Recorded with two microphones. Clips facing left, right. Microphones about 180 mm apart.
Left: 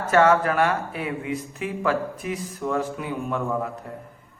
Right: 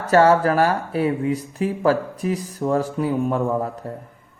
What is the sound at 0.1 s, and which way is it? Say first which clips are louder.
A man's voice: right 3 dB; 35° right (ahead or behind).